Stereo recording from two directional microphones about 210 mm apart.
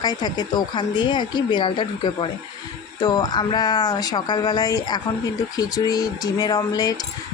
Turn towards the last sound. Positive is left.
turn(degrees=20)  # may be behind; listen again after turning